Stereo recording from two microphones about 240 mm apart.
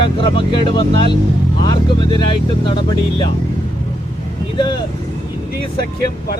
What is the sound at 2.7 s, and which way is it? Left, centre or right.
Speech, left.